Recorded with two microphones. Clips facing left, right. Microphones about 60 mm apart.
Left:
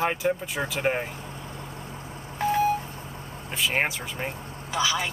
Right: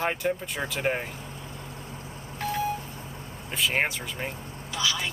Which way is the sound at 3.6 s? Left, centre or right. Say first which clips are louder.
Even; centre.